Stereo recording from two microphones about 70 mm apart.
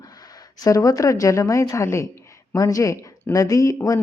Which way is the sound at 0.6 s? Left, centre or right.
Left.